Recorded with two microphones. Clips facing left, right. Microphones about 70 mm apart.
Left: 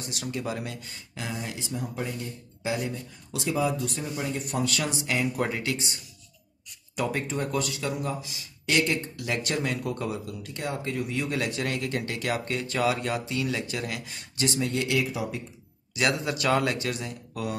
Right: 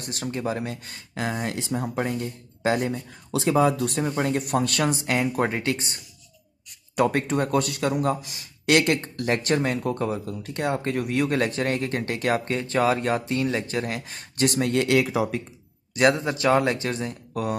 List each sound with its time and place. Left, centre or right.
0.0 s speech: right
0.8 s speech: right
7.0 s speech: right
9.2 s speech: right
10.5 s speech: right
15.9 s speech: right